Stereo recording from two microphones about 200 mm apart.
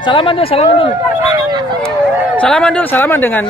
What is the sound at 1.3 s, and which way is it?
Speech, 20° right (ahead or behind).